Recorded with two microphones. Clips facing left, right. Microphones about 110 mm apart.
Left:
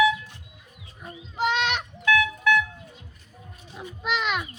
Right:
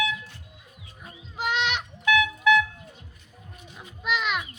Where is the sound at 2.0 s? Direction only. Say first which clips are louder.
Even; 20° right (ahead or behind).